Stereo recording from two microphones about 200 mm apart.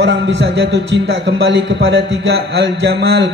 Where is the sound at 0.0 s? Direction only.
60° right (ahead or behind).